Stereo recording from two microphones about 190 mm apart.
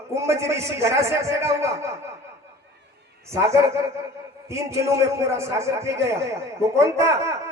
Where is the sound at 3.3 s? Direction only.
15° right (ahead or behind).